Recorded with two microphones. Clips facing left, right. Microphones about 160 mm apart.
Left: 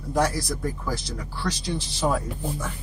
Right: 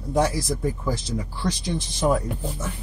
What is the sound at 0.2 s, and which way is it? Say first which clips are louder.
Speech: right 2 dB; 20° right (ahead or behind).